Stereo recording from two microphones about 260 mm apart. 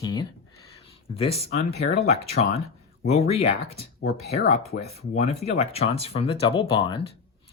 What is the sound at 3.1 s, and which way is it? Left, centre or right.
Speech, left.